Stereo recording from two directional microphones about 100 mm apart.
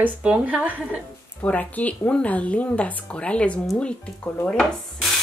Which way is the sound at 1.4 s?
15° left (ahead or behind).